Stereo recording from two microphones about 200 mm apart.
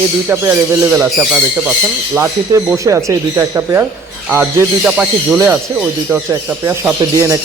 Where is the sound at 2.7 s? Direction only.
15° right (ahead or behind).